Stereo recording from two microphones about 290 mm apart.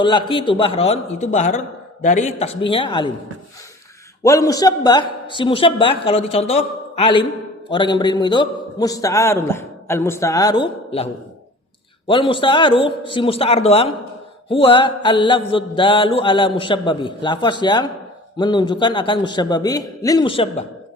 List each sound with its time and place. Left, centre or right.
0.0 s a man's voice: centre
4.2 s a man's voice: centre